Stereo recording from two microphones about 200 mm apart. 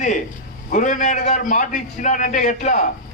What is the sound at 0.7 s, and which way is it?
A man's voice, 40° left (ahead or behind).